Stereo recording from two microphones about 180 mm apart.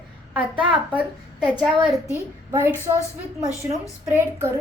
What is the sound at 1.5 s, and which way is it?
Speech, 10° left (ahead or behind).